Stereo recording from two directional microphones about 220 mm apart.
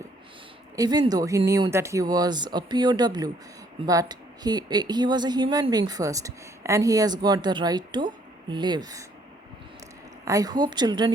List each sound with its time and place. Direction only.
0.8 s a woman's voice: 20° right (ahead or behind)
10.2 s a woman's voice: 15° right (ahead or behind)